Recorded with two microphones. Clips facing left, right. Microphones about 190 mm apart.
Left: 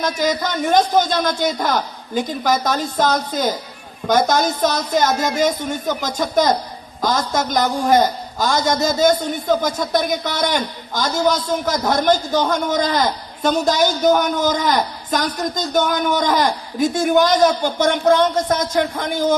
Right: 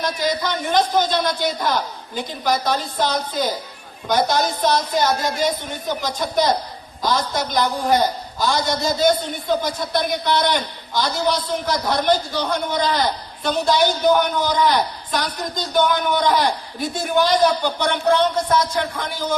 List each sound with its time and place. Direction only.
0.0 s a man's voice: 45° left (ahead or behind)